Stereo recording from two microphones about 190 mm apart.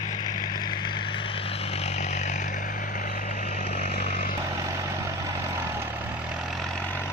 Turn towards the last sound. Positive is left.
turn(degrees=-15)  # may be behind; listen again after turning